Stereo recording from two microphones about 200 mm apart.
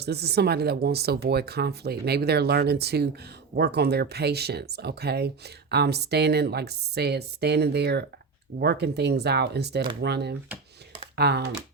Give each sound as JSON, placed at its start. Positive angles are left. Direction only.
{"t": 0.0, "sound": "speech", "side_deg": -55}